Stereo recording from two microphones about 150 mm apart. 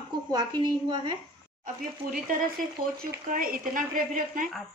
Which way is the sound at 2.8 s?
65° right (ahead or behind).